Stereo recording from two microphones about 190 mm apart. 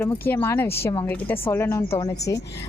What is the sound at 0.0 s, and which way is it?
A woman's voice, 10° left (ahead or behind).